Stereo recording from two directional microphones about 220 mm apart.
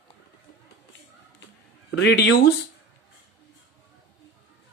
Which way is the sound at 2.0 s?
50° left (ahead or behind).